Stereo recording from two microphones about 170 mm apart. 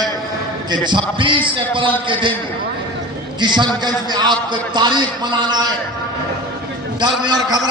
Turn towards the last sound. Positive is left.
turn(degrees=-25)  # may be behind; listen again after turning